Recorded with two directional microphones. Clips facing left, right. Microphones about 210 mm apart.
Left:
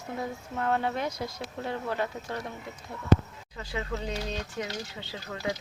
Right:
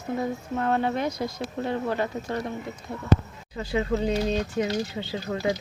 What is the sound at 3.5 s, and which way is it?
Speech, 25° right (ahead or behind).